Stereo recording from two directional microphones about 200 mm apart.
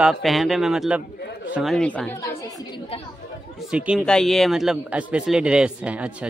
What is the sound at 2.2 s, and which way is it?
Chatter, 15° left (ahead or behind).